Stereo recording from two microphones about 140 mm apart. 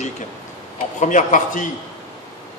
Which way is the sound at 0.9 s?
65° left (ahead or behind).